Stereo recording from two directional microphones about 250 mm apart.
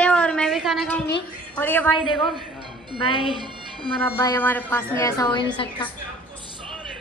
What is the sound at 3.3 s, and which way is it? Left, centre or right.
Speech, centre.